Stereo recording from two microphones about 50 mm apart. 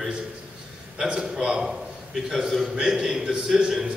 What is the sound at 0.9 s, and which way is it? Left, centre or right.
A man's voice, centre.